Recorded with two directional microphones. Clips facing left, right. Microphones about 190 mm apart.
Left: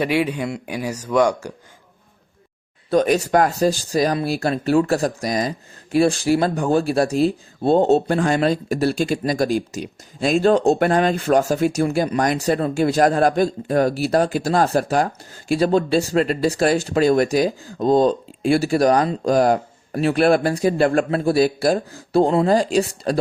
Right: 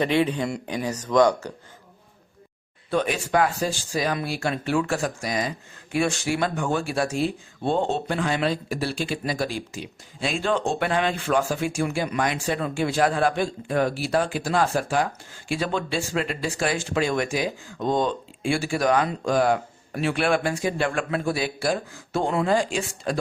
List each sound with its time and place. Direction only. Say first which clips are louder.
0.0 s speech: left 2 dB; 10° left (ahead or behind)
2.9 s speech: left 7 dB; 40° left (ahead or behind)